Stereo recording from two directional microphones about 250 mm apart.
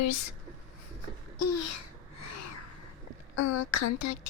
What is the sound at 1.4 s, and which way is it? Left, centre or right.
Speech, left.